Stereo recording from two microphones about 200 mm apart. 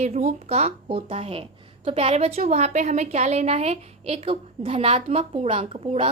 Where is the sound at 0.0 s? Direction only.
35° right (ahead or behind).